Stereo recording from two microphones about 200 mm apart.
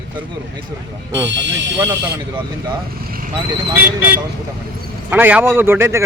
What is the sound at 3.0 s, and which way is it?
Vehicle, 45° right (ahead or behind).